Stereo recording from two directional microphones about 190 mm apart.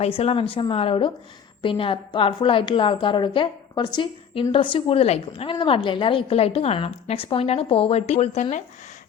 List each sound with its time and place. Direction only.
0.0 s a woman's voice: 30° left (ahead or behind)